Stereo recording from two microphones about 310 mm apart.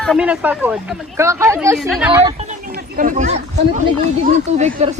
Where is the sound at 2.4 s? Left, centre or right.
Right.